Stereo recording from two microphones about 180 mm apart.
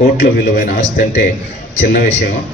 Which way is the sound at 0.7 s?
40° left (ahead or behind).